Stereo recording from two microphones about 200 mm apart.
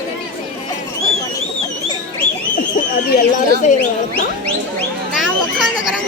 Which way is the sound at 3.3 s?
40° left (ahead or behind).